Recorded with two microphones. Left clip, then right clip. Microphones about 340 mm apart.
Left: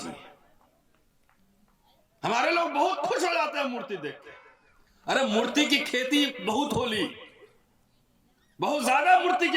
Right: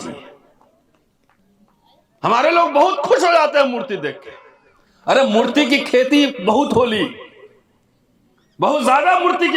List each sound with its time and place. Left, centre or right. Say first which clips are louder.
2.2 s speech: right 11 dB; centre
8.5 s speech: right 10 dB; centre